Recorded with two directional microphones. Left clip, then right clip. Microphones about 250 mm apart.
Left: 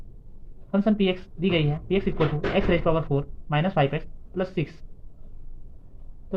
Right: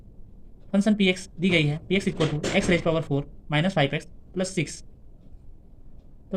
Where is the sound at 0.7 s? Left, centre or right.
Right.